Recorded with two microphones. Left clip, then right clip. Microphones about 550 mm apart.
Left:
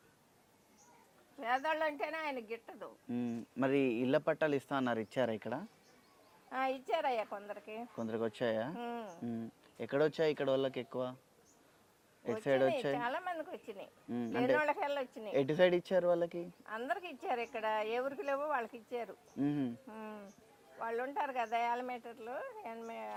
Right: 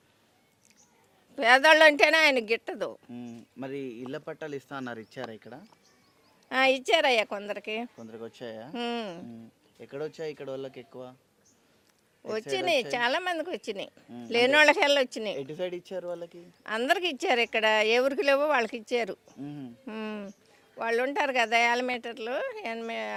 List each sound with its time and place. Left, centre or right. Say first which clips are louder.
1.4 s speech: right 16 dB; right
3.1 s speech: left 3 dB; centre
6.5 s speech: right 12 dB; right
7.9 s speech: left 4 dB; centre
8.7 s speech: right 10 dB; right
9.8 s speech: left 4 dB; centre
13.0 s speech: right 10 dB; right
15.4 s speech: left 4 dB; centre
16.6 s speech: right 14 dB; right
19.4 s speech: left 5 dB; centre
19.9 s speech: right 11 dB; right